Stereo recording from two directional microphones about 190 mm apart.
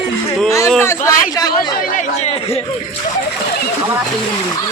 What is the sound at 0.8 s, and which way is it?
Speech, 15° left (ahead or behind).